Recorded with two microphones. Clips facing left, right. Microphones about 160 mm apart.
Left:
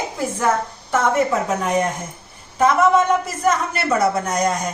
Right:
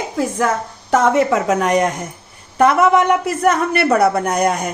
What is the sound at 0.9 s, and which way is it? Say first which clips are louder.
Speech: right 4 dB; 90° right.